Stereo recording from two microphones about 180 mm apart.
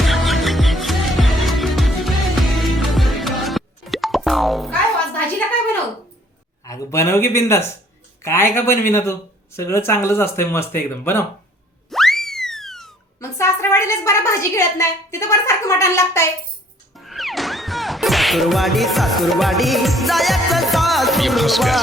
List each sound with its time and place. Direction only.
0.0 s music: centre (ahead or behind)
6.7 s a sound: 15° left (ahead or behind)
8.2 s a woman's voice: 15° left (ahead or behind)
11.9 s music: centre (ahead or behind)
13.1 s a woman's voice: 15° left (ahead or behind)
17.0 s music: centre (ahead or behind)